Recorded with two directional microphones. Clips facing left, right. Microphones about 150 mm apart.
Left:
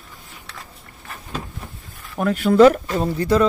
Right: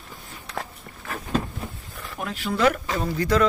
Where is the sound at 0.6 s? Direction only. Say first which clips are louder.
Right 7 dB; 90° right.